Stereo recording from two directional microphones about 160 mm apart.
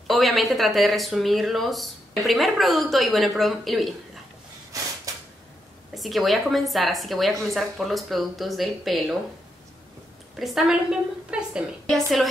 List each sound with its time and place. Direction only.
0.0 s speech: centre (ahead or behind)
4.7 s a sound: 20° right (ahead or behind)
5.9 s speech: centre (ahead or behind)
10.4 s speech: centre (ahead or behind)